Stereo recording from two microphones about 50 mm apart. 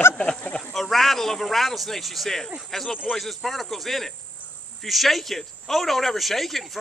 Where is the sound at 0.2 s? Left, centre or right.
Left.